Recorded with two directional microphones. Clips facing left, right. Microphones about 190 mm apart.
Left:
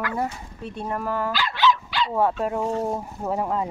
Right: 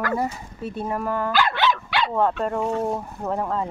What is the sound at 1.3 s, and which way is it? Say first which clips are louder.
Dog: right 1 dB; 55° right (ahead or behind).